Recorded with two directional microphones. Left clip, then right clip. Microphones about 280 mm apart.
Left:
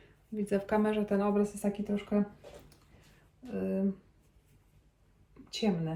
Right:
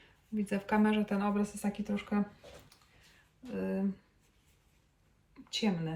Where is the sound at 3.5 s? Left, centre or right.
Centre.